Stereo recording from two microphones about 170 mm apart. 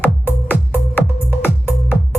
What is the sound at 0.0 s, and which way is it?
Music, 10° left (ahead or behind).